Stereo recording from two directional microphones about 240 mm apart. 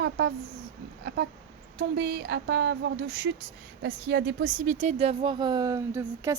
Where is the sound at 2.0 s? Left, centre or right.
Right.